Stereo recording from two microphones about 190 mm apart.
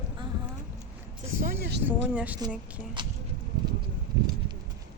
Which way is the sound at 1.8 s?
10° right (ahead or behind).